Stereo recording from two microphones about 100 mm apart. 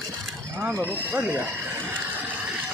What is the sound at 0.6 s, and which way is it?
Speech, 25° right (ahead or behind).